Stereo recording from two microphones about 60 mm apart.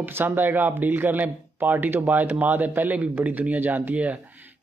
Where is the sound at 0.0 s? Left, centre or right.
Right.